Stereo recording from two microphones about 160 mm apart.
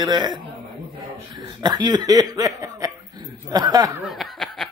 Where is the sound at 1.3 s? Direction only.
25° right (ahead or behind).